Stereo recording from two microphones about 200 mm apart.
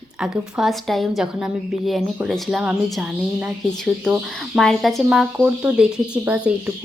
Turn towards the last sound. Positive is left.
turn(degrees=-5)  # may be behind; listen again after turning